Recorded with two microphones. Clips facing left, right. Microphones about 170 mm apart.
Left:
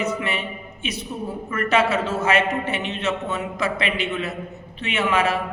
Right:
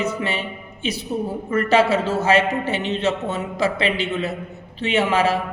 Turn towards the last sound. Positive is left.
turn(degrees=-30)  # may be behind; listen again after turning